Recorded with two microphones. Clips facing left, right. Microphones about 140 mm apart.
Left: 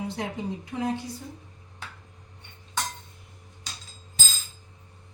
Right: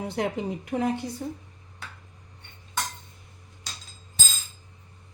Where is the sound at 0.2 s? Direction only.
65° right (ahead or behind).